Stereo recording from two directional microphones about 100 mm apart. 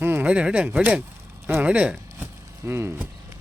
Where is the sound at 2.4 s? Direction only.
25° right (ahead or behind).